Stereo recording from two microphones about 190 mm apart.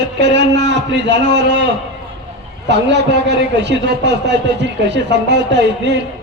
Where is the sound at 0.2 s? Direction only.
65° right (ahead or behind).